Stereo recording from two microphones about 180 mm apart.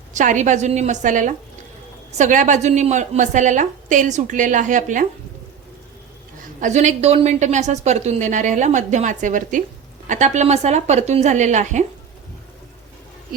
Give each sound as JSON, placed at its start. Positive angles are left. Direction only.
{"t": 0.1, "sound": "a woman's voice", "side_deg": -45}
{"t": 6.6, "sound": "a woman's voice", "side_deg": -40}